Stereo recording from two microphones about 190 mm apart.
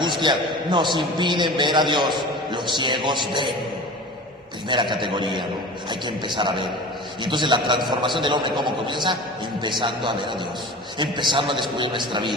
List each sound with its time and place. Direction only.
0.2 s a man's voice: 25° right (ahead or behind)
4.7 s a man's voice: 25° right (ahead or behind)